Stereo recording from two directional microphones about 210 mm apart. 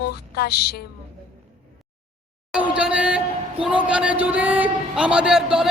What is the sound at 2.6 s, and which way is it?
Speech, 5° right (ahead or behind).